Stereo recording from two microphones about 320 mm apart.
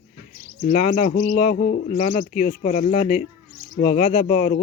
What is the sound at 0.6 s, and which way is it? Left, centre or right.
Speech, left.